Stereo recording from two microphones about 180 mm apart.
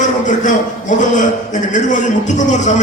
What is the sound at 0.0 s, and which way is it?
A man's voice, 45° left (ahead or behind).